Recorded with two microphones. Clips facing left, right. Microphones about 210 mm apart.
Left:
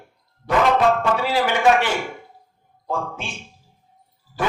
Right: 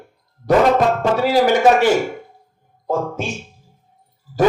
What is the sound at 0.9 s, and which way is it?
A man's voice, 40° right (ahead or behind).